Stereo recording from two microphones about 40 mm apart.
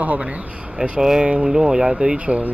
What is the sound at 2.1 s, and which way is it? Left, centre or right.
Speech, right.